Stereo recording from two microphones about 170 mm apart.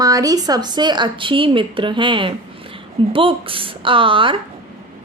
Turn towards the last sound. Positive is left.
turn(degrees=-30)  # may be behind; listen again after turning